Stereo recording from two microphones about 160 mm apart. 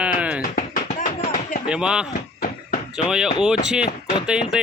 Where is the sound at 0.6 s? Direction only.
55° left (ahead or behind).